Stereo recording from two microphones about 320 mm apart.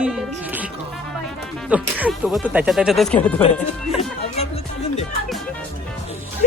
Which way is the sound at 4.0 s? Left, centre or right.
Centre.